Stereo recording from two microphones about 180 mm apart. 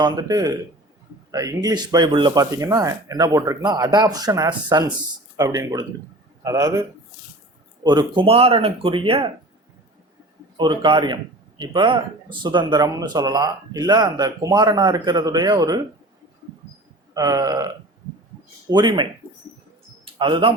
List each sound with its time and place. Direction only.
0.0 s a man's voice: 20° right (ahead or behind)
7.9 s speech: 25° right (ahead or behind)
10.6 s speech: 25° right (ahead or behind)
17.2 s speech: 20° right (ahead or behind)
18.7 s speech: 25° right (ahead or behind)
20.1 s speech: 30° right (ahead or behind)